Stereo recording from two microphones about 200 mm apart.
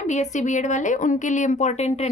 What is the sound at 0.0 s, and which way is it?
A woman's voice, 35° left (ahead or behind).